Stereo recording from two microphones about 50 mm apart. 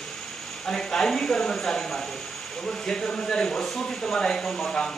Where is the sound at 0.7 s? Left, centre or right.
Centre.